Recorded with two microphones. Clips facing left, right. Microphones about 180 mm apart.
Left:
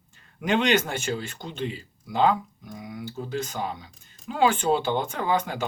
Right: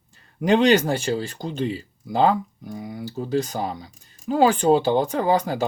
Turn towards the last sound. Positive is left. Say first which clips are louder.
# right 5 dB
turn(degrees=-35)  # may be behind; listen again after turning